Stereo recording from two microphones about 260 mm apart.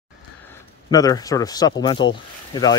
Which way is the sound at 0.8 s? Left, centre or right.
Centre.